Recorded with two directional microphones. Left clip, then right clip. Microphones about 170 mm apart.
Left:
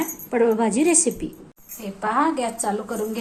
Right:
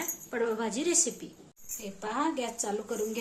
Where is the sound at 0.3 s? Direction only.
20° left (ahead or behind).